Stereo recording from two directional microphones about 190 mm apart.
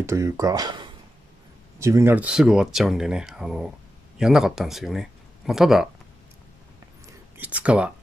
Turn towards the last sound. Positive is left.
turn(degrees=-5)  # may be behind; listen again after turning